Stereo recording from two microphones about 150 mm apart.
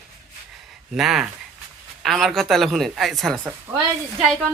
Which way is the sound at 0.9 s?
Centre (ahead or behind).